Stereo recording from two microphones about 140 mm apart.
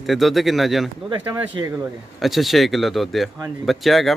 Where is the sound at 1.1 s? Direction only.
15° right (ahead or behind).